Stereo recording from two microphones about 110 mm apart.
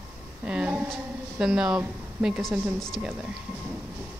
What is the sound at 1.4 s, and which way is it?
Speech, 5° right (ahead or behind).